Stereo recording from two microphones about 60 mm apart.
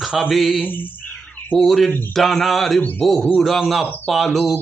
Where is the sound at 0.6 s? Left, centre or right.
Left.